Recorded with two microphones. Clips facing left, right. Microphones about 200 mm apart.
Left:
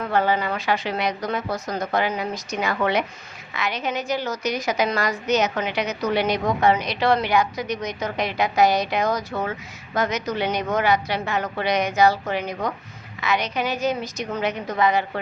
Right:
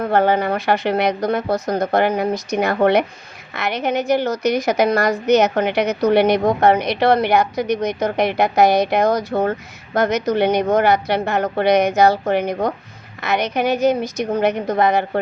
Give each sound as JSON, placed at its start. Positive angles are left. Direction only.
{"t": 0.0, "sound": "a woman's voice", "side_deg": -60}